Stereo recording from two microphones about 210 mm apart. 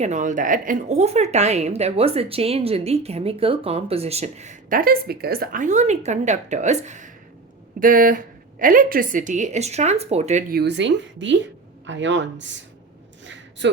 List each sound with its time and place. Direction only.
0.0 s a woman's voice: 35° right (ahead or behind)
10.5 s a woman's voice: 55° right (ahead or behind)
13.6 s speech: 60° right (ahead or behind)